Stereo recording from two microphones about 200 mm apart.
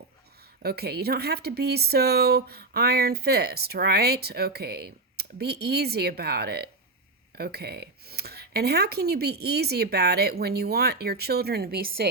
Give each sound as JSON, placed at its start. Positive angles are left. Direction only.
{"t": 0.6, "sound": "speech", "side_deg": -50}